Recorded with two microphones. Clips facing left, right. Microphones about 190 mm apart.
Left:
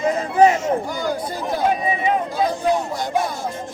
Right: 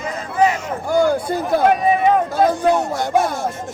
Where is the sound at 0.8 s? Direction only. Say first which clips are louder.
Right 8 dB; 55° right (ahead or behind).